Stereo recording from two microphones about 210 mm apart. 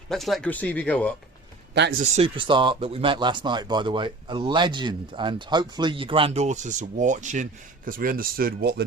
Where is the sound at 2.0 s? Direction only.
30° right (ahead or behind).